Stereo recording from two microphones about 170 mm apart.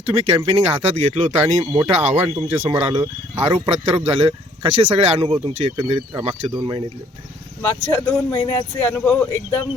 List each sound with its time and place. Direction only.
0.0 s speech: 35° right (ahead or behind)
3.0 s speech: 20° right (ahead or behind)
3.7 s speech: 35° right (ahead or behind)
6.5 s speech: 30° right (ahead or behind)
7.6 s speech: 10° left (ahead or behind)